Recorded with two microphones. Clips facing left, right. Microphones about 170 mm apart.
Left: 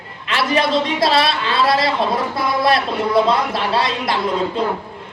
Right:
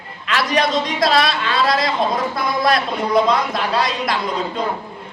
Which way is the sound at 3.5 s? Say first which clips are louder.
Left 1 dB; 25° left (ahead or behind).